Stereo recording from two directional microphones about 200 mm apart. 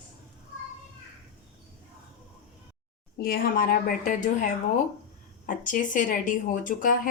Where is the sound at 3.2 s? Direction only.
45° left (ahead or behind).